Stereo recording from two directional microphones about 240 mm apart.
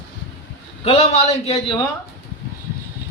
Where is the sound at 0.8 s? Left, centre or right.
Left.